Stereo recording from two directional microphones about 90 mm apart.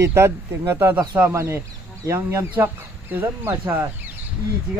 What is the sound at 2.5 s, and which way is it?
Speech, 20° right (ahead or behind).